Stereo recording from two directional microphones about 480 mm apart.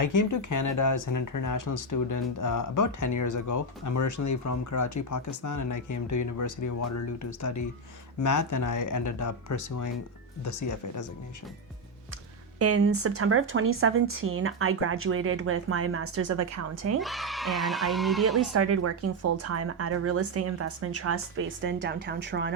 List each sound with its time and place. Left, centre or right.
0.0 s speech: left
12.5 s speech: right
17.0 s speech: centre
18.5 s speech: right